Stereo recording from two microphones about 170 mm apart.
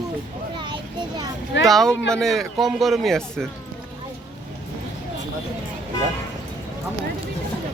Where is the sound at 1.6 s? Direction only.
Centre (ahead or behind).